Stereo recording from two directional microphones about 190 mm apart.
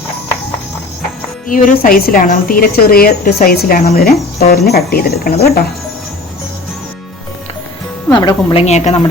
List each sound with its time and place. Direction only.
1.5 s a woman's voice: 50° left (ahead or behind)
8.1 s speech: 20° left (ahead or behind)
8.6 s a woman's voice: 35° left (ahead or behind)